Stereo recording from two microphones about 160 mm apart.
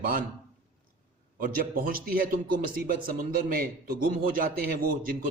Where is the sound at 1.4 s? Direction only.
60° right (ahead or behind).